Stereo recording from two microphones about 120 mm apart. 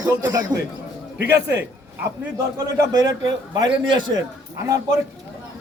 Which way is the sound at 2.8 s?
30° right (ahead or behind).